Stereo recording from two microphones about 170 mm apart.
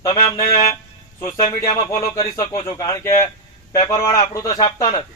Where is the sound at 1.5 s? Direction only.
20° left (ahead or behind).